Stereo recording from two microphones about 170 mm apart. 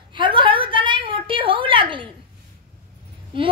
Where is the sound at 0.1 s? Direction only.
30° right (ahead or behind).